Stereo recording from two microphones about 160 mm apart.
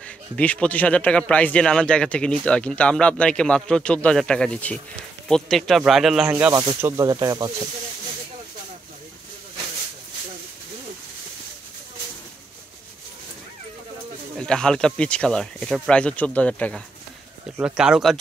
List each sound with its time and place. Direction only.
0.4 s a man's voice: 10° left (ahead or behind)
6.3 s speech: 20° right (ahead or behind)
14.3 s speech: 5° left (ahead or behind)
17.6 s speech: 5° right (ahead or behind)